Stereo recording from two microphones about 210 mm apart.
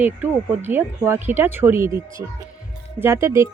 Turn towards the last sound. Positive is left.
turn(degrees=-15)  # may be behind; listen again after turning